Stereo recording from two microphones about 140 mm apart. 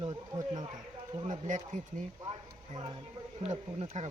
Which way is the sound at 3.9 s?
55° right (ahead or behind).